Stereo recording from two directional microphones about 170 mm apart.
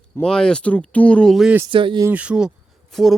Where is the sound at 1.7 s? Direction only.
30° right (ahead or behind).